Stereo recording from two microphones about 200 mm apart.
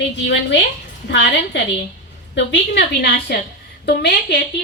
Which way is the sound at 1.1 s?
65° left (ahead or behind).